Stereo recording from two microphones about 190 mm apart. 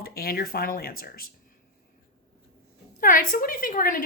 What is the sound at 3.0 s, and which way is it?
A woman's voice, 45° left (ahead or behind).